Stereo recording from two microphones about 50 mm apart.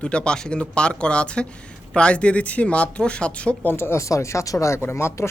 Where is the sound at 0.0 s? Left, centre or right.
Centre.